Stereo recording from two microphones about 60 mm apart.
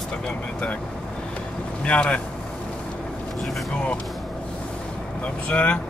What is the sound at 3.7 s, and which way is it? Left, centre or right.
Speech, centre.